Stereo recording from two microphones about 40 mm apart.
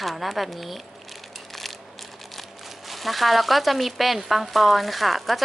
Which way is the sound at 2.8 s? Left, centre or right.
Centre.